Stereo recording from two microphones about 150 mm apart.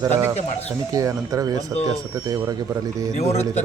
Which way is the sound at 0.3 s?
45° left (ahead or behind).